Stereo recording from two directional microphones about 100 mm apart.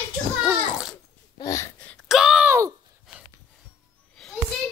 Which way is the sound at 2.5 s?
30° right (ahead or behind).